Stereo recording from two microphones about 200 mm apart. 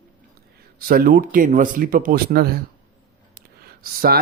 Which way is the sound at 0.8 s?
45° right (ahead or behind).